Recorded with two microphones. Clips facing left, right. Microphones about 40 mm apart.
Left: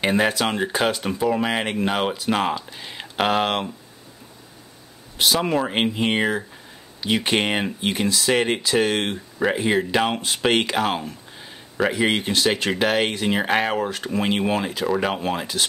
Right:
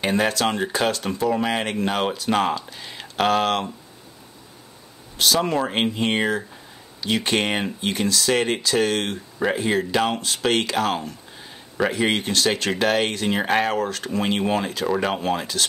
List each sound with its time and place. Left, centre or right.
0.0 s speech: centre
5.1 s speech: centre